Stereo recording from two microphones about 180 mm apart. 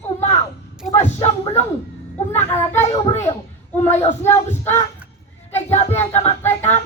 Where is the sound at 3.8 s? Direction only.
35° left (ahead or behind).